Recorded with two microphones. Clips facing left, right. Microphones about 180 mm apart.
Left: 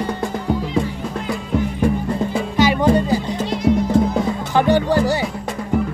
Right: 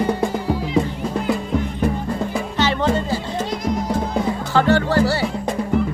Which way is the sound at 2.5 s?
10° left (ahead or behind).